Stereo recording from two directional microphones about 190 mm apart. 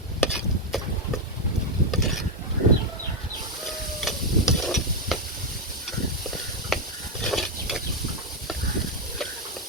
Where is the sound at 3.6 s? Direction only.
Centre (ahead or behind).